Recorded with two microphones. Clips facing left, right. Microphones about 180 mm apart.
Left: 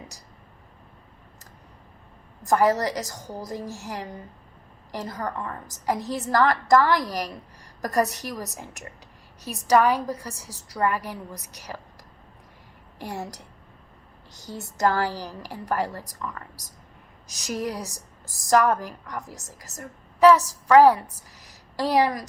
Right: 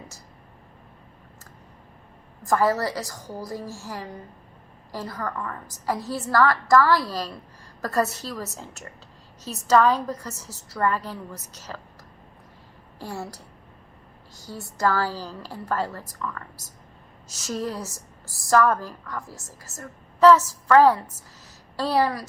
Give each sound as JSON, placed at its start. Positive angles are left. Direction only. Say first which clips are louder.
{"t": 2.4, "sound": "a woman's voice", "louder": "left 1 dB", "side_deg": 20}
{"t": 13.0, "sound": "a woman's voice", "louder": "even", "side_deg": 20}
{"t": 21.4, "sound": "a sound", "louder": "left 1 dB", "side_deg": 15}